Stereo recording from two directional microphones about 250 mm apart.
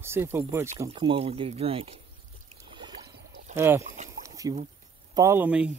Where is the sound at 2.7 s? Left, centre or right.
Centre.